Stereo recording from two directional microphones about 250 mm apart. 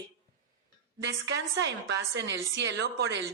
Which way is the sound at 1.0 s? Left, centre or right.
Right.